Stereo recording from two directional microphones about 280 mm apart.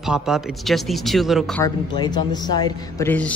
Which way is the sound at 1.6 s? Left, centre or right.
Centre.